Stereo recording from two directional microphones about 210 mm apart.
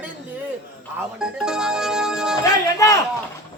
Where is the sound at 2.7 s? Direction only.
15° left (ahead or behind).